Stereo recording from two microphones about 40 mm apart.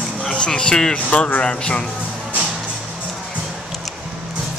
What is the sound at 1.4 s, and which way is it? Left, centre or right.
Speech, left.